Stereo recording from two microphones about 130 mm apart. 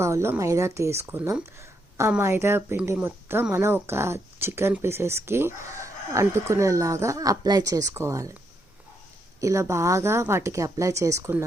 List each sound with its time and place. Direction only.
0.0 s speech: 20° right (ahead or behind)
9.4 s speech: 25° right (ahead or behind)